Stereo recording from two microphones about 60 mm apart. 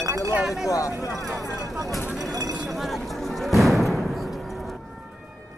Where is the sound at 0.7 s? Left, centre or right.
Left.